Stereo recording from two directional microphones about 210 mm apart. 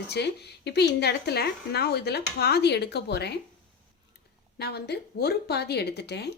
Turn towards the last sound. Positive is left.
turn(degrees=50)  # may be behind; listen again after turning